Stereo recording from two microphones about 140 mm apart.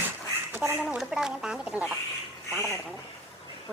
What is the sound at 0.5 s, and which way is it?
Duck, 15° right (ahead or behind).